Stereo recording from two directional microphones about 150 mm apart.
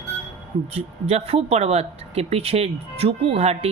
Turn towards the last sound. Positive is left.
turn(degrees=-40)  # may be behind; listen again after turning